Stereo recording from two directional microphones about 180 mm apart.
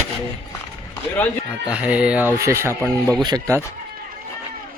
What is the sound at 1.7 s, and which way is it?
Speech, 5° right (ahead or behind).